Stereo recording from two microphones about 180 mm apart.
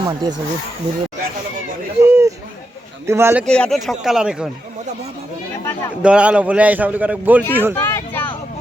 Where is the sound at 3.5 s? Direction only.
5° left (ahead or behind).